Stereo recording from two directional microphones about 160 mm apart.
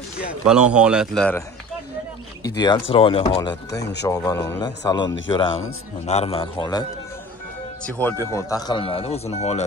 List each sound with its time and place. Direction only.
0.3 s a man's voice: 5° right (ahead or behind)
2.4 s speech: 25° left (ahead or behind)
4.1 s speech: 20° left (ahead or behind)
7.8 s speech: 10° left (ahead or behind); by 9.7 s 40° left (ahead or behind)